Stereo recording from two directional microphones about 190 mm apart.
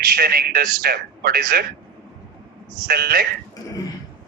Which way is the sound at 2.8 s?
50° right (ahead or behind).